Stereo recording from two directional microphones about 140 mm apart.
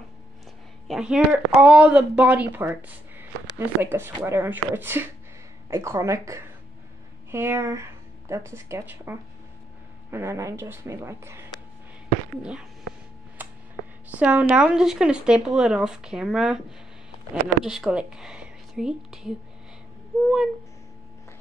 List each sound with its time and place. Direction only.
0.8 s speech: 5° right (ahead or behind)
12.4 s speech: 5° right (ahead or behind)
13.4 s a sound: 10° right (ahead or behind)
14.1 s speech: 10° right (ahead or behind)